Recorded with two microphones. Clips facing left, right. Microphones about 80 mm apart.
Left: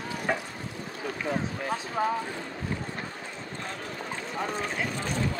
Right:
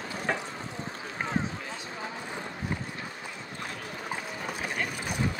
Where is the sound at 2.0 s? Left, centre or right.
Left.